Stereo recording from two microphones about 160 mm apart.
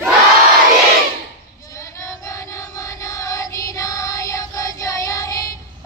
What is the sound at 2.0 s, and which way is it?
Music, 20° left (ahead or behind).